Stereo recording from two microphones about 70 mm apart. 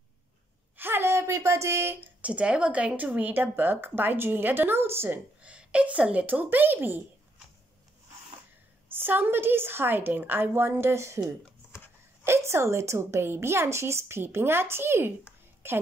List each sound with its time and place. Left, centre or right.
0.7 s a sound: right
2.0 s speech: right
5.4 s a woman's voice: centre
8.8 s a woman's voice: right
12.3 s a woman's voice: right